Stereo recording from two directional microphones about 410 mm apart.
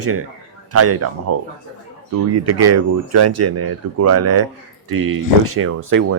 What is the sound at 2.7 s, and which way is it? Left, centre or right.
Speech, right.